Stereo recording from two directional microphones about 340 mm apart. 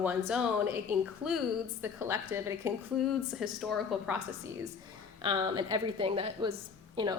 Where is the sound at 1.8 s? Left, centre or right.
Centre.